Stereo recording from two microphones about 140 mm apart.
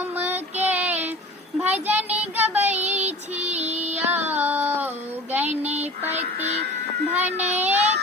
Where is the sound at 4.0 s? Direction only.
10° right (ahead or behind).